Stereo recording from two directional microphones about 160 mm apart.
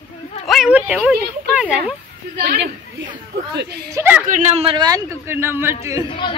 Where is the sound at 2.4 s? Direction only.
85° right.